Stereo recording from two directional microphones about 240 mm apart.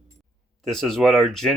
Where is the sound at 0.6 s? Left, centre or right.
Centre.